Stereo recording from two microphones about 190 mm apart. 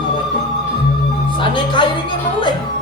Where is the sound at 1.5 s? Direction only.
25° left (ahead or behind).